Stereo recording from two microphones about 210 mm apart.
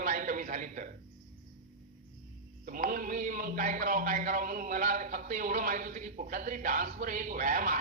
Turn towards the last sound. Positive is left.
turn(degrees=-40)  # may be behind; listen again after turning